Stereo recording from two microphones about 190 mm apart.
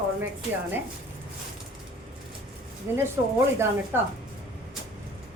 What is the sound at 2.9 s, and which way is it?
A woman's voice, 10° right (ahead or behind).